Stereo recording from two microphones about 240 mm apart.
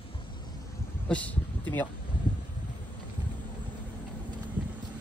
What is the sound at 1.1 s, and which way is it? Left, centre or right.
Speech, centre.